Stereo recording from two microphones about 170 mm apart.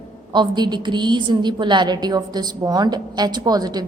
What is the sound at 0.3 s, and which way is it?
A woman's voice, 25° right (ahead or behind).